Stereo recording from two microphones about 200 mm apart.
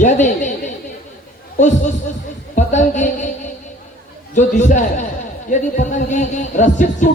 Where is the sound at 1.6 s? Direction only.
35° left (ahead or behind).